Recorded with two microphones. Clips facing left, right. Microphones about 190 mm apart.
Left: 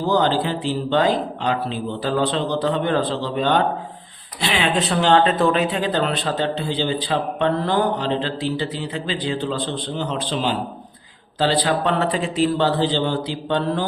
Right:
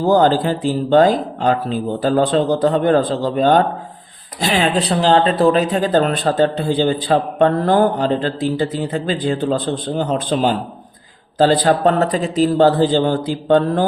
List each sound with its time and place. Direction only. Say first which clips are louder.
0.0 s speech: right 5 dB; 45° right (ahead or behind)